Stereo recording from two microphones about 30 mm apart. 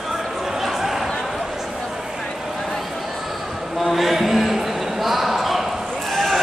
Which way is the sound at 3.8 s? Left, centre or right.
Centre.